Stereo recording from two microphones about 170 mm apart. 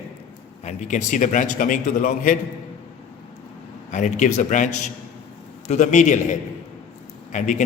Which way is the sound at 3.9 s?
45° left (ahead or behind).